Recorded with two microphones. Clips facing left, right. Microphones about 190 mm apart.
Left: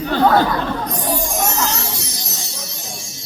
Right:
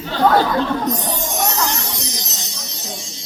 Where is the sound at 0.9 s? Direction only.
20° right (ahead or behind).